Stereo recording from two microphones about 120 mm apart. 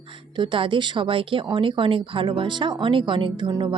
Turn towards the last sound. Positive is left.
turn(degrees=-35)  # may be behind; listen again after turning